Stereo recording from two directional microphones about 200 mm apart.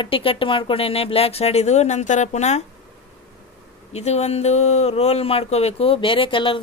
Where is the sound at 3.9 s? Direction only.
35° left (ahead or behind).